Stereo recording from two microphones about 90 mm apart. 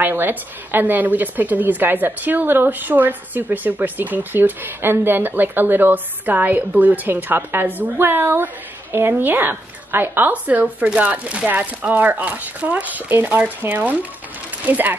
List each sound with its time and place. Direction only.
0.0 s a woman's voice: 20° right (ahead or behind)